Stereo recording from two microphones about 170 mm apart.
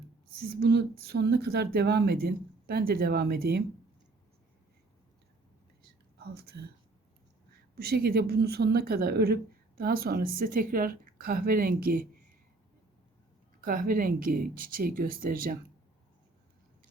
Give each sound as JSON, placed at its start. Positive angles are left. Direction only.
{"t": 0.6, "sound": "speech", "side_deg": -75}
{"t": 6.1, "sound": "a woman's voice", "side_deg": -65}
{"t": 13.6, "sound": "a woman's voice", "side_deg": -55}